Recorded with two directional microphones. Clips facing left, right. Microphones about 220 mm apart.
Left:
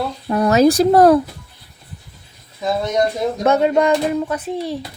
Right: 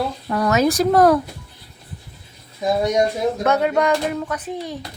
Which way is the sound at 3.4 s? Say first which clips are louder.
Left 5 dB; 25° left (ahead or behind).